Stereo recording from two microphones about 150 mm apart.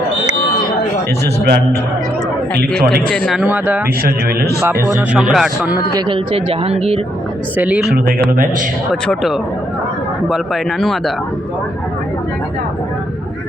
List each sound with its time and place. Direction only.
1.2 s a man's voice: 90° right
3.1 s speech: 10° left (ahead or behind)
3.3 s speech: 10° right (ahead or behind)
4.0 s a man's voice: 90° right
4.9 s speech: 5° right (ahead or behind)
6.1 s speech: 40° right (ahead or behind)
7.5 s speech: 10° right (ahead or behind)
9.0 s speech: centre (ahead or behind)